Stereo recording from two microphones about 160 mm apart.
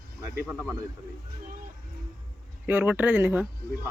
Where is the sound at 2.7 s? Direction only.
10° right (ahead or behind).